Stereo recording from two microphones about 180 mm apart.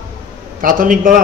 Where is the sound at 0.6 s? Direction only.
50° right (ahead or behind).